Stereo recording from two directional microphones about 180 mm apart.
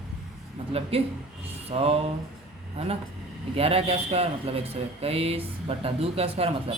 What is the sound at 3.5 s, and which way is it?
Speech, 35° right (ahead or behind).